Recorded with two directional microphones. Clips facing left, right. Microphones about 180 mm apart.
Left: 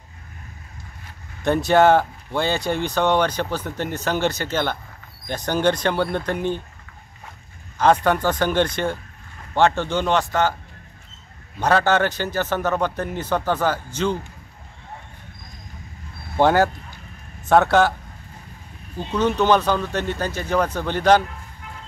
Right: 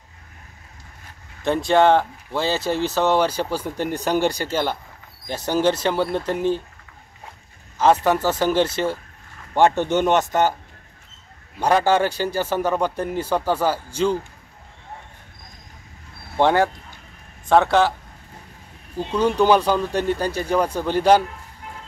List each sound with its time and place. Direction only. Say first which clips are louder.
1.4 s speech: left 1 dB; centre (ahead or behind)
7.8 s speech: even; 5° right (ahead or behind)
11.6 s speech: right 1 dB; 10° right (ahead or behind)
16.3 s speech: left 1 dB; 5° left (ahead or behind)
18.9 s speech: right 2 dB; 10° right (ahead or behind)